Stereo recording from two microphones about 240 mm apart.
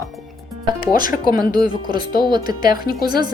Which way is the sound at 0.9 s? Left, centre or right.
Left.